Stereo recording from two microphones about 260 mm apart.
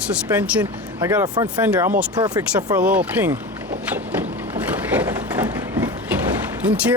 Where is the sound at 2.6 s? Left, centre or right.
Centre.